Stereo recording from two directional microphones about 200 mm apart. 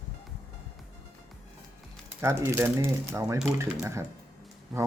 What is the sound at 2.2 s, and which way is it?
Speech, 15° right (ahead or behind).